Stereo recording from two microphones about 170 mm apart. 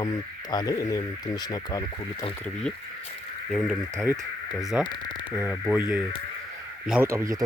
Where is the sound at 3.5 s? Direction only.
Centre (ahead or behind).